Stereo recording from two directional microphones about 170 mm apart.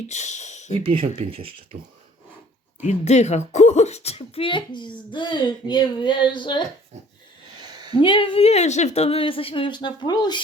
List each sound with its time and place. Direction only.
0.1 s speech: 45° left (ahead or behind)
0.8 s speech: 30° right (ahead or behind)
2.8 s speech: 40° left (ahead or behind)
7.6 s a sound: 25° right (ahead or behind)
7.9 s speech: 30° left (ahead or behind)